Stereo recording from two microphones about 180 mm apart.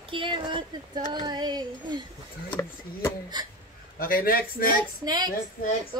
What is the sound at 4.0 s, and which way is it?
Speech, 55° left (ahead or behind).